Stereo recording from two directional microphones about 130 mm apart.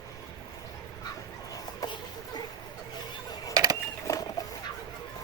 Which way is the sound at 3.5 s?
30° right (ahead or behind).